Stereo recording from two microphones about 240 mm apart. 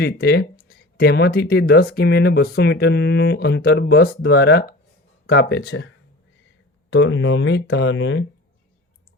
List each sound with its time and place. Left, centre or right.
0.0 s speech: left
6.9 s speech: left